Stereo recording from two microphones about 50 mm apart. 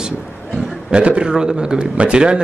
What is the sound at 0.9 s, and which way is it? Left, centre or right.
A man's voice, right.